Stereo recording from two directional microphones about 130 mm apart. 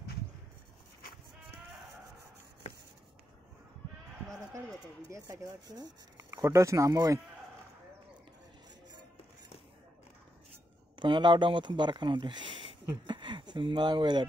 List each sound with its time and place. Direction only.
5.3 s speech: 30° right (ahead or behind)
6.1 s speech: 20° right (ahead or behind)
11.0 s speech: 35° right (ahead or behind)